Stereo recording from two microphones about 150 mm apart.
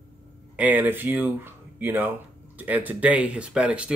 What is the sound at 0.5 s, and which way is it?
Speech, 10° right (ahead or behind).